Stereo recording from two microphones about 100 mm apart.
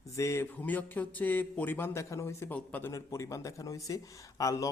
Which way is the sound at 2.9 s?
30° left (ahead or behind).